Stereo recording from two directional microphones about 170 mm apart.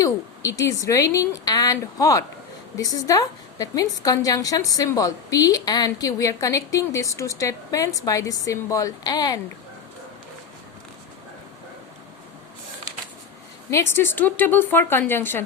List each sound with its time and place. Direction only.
0.0 s a woman's voice: 20° left (ahead or behind)
13.7 s speech: 15° left (ahead or behind)